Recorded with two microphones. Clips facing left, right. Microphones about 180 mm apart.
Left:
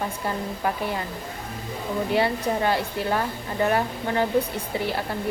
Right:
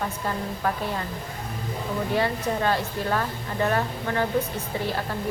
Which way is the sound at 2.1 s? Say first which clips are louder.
Left 2 dB; 15° left (ahead or behind).